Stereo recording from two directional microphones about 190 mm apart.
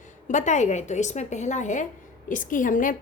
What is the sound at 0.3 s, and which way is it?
A woman's voice, 40° left (ahead or behind).